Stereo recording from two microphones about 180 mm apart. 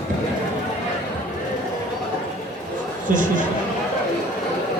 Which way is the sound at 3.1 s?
50° right (ahead or behind).